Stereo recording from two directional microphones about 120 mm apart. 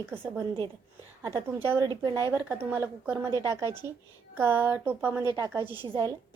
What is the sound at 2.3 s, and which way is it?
A woman's voice, 20° right (ahead or behind).